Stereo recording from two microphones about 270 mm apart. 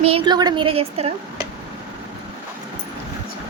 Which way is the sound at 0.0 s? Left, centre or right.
Centre.